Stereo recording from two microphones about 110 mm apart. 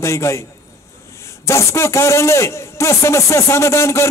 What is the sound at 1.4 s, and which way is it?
A man's voice, 25° left (ahead or behind).